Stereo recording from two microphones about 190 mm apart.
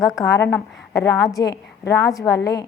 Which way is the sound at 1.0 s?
65° left (ahead or behind).